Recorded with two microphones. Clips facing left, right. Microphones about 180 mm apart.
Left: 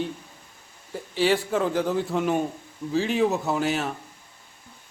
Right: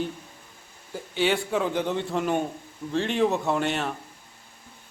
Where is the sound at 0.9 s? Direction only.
Centre (ahead or behind).